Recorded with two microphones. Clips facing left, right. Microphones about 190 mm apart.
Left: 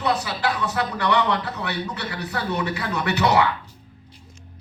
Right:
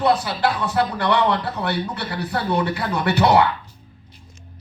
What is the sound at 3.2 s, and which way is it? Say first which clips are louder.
Speech: right 3 dB; 55° right (ahead or behind).